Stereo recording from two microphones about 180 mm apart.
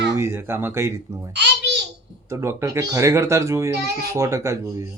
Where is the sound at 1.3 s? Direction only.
70° right (ahead or behind).